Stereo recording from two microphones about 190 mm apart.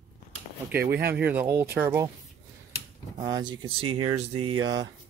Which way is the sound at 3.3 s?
20° right (ahead or behind).